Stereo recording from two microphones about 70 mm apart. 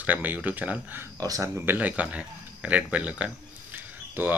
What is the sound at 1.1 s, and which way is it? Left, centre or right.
Speech, right.